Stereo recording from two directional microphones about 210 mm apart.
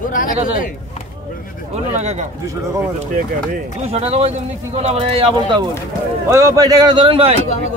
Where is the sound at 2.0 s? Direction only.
35° right (ahead or behind).